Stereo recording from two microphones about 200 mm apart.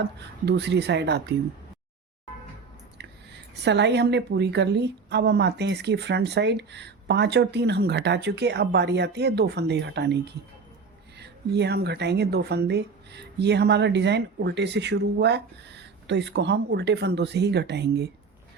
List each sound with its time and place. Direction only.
0.0 s speech: 55° right (ahead or behind)
3.0 s a sound: 55° right (ahead or behind)
3.5 s speech: 60° right (ahead or behind)